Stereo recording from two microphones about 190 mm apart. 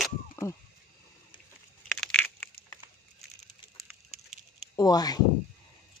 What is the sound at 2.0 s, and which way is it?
Crushing, 5° left (ahead or behind).